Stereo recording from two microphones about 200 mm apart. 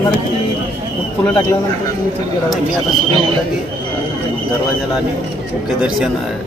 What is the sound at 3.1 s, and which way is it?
Speech, 25° right (ahead or behind).